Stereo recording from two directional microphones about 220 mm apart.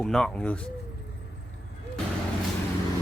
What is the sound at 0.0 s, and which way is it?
Speech, centre (ahead or behind).